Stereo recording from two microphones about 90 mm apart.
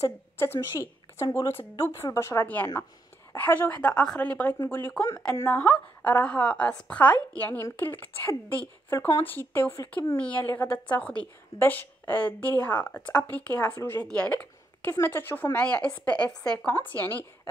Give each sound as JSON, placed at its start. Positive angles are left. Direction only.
{"t": 0.0, "sound": "a woman's voice", "side_deg": 25}
{"t": 2.4, "sound": "a woman's voice", "side_deg": 20}
{"t": 16.9, "sound": "a woman's voice", "side_deg": 20}